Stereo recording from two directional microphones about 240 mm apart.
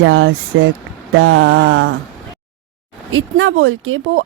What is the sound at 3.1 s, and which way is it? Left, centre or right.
Speech, right.